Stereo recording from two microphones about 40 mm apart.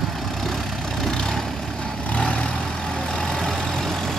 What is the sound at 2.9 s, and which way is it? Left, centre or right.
Vehicle, centre.